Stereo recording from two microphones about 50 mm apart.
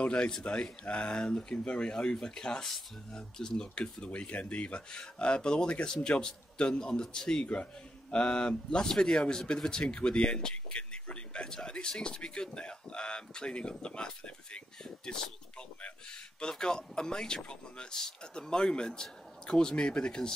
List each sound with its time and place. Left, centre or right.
0.0 s a man's voice: left